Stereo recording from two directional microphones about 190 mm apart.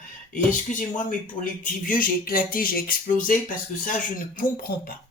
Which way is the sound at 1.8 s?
45° left (ahead or behind).